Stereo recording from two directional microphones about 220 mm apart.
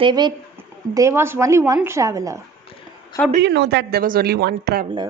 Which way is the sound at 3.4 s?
50° right (ahead or behind).